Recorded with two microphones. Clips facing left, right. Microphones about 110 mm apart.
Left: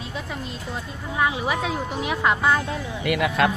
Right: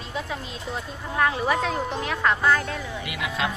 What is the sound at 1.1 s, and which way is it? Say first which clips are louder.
Speech: right 1 dB; 10° left (ahead or behind).